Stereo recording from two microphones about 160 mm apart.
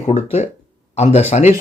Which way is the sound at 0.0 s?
40° left (ahead or behind).